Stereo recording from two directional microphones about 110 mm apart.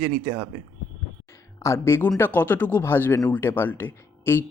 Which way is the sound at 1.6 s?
25° left (ahead or behind).